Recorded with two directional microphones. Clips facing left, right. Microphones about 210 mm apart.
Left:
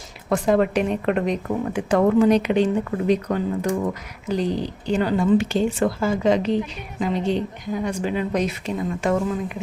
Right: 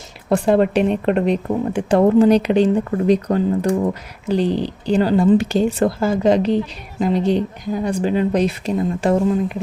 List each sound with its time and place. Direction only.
0.3 s speech: 30° right (ahead or behind)